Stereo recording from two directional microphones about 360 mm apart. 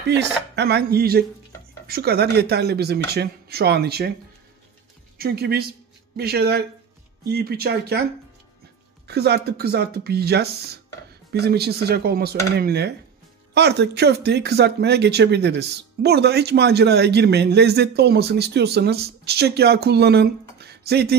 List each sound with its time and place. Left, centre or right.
0.6 s speech: right
5.1 s a woman's voice: right
9.0 s speech: right